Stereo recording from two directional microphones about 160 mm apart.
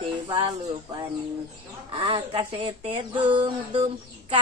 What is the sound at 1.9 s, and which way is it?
Speech, 35° right (ahead or behind).